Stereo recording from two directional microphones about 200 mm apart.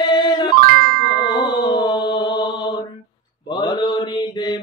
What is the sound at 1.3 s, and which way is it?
Mantra, 20° left (ahead or behind).